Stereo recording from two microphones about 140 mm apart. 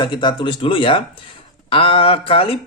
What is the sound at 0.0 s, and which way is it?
Speech, 30° left (ahead or behind).